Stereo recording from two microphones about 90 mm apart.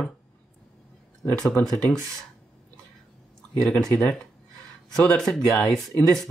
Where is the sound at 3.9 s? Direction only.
25° left (ahead or behind).